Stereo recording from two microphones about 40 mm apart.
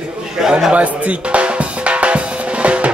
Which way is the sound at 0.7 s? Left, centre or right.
Right.